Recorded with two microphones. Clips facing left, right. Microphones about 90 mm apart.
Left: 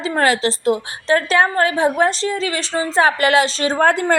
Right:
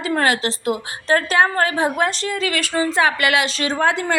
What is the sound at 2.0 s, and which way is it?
A woman's voice, 35° left (ahead or behind).